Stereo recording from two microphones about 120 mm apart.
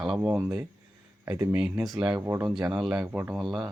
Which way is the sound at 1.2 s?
30° right (ahead or behind).